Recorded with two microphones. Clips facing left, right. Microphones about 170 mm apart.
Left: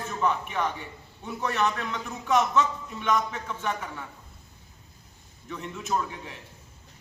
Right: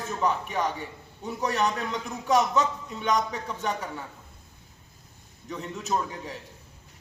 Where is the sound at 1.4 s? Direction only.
40° right (ahead or behind).